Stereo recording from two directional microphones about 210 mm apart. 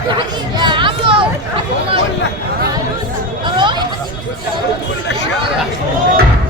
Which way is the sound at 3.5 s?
20° right (ahead or behind).